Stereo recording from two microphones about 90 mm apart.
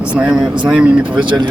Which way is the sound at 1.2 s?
55° right (ahead or behind).